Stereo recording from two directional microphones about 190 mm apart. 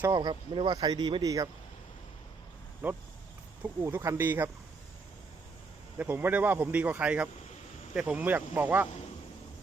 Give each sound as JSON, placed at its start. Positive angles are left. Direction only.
{"t": 0.0, "sound": "speech", "side_deg": -20}
{"t": 2.8, "sound": "speech", "side_deg": -10}
{"t": 6.0, "sound": "speech", "side_deg": -10}